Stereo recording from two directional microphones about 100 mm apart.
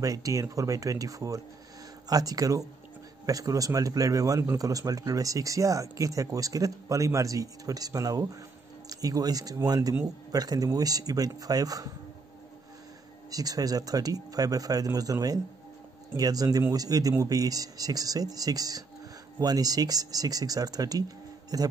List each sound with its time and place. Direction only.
0.0 s speech: 35° right (ahead or behind)
13.3 s speech: 35° right (ahead or behind)